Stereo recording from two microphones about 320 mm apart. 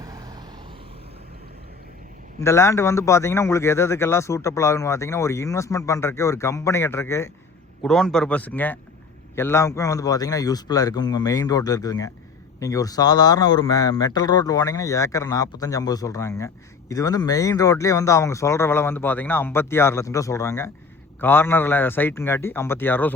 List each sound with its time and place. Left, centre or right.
2.4 s a man's voice: centre